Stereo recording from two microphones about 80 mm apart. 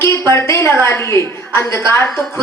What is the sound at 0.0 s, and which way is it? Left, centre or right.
A woman's voice, left.